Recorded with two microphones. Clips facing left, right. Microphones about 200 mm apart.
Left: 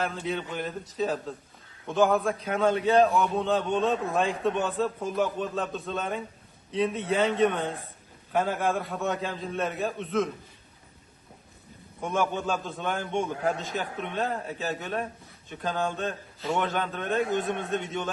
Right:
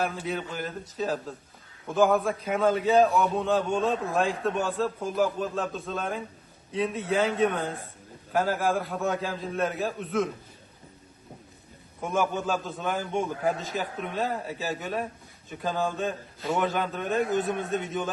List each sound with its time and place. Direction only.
0.0 s a man's voice: 5° right (ahead or behind)
11.9 s a man's voice: centre (ahead or behind)